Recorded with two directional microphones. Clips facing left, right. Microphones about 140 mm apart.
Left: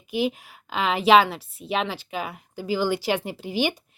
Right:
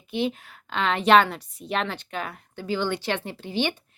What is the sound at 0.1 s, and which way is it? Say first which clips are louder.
A woman's voice: left 2 dB; 10° left (ahead or behind).